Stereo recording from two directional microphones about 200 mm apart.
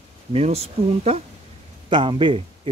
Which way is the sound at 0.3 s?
30° right (ahead or behind).